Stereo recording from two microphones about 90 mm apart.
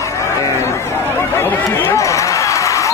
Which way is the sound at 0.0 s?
35° left (ahead or behind).